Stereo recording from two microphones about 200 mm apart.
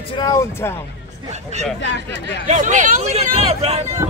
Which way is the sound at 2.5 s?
35° right (ahead or behind).